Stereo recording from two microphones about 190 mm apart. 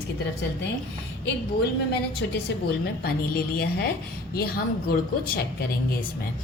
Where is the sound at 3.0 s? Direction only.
55° left (ahead or behind).